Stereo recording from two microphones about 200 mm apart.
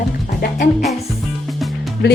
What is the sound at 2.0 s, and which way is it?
Speech, 55° left (ahead or behind).